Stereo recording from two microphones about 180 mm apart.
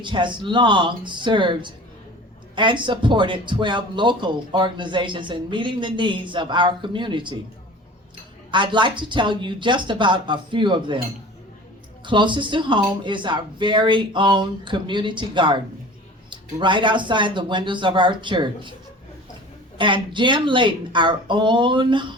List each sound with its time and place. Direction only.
0.0 s speech: 25° right (ahead or behind)
8.4 s speech: 25° right (ahead or behind)
12.0 s speech: 25° right (ahead or behind)
19.8 s speech: 25° right (ahead or behind)